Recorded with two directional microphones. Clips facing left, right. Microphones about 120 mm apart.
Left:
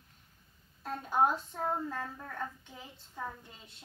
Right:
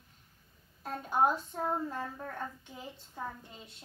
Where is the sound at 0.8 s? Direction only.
15° right (ahead or behind).